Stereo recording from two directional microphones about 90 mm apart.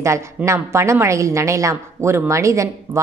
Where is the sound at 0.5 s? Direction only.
30° right (ahead or behind).